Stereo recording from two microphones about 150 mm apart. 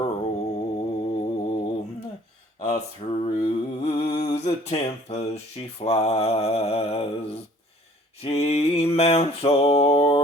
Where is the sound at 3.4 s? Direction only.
50° left (ahead or behind).